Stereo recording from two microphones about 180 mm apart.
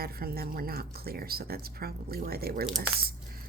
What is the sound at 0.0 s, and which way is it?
Speech, 55° right (ahead or behind).